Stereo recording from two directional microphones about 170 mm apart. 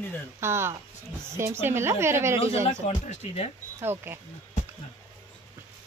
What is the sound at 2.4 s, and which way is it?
Speech, 35° left (ahead or behind).